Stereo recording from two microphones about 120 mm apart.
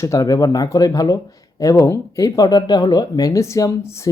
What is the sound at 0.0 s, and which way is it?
Speech, 25° left (ahead or behind).